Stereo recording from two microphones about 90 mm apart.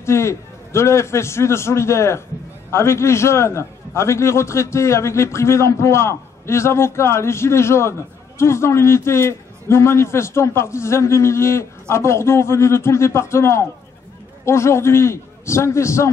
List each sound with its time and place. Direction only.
0.0 s a man's voice: 30° left (ahead or behind)